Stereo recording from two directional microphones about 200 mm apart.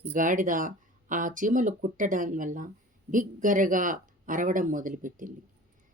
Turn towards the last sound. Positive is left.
turn(degrees=-40)  # may be behind; listen again after turning